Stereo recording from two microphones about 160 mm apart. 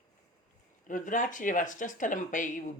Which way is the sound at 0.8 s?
55° left (ahead or behind).